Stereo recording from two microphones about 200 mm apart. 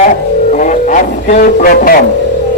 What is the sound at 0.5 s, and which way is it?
Speech, 40° left (ahead or behind).